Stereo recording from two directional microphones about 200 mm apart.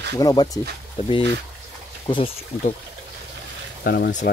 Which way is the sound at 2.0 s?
25° left (ahead or behind).